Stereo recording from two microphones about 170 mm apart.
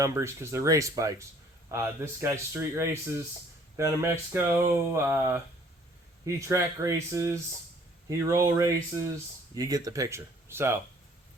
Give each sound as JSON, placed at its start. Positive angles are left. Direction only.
{"t": 0.0, "sound": "speech", "side_deg": -15}